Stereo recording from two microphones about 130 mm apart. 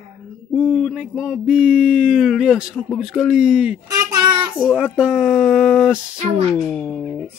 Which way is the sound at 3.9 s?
30° right (ahead or behind).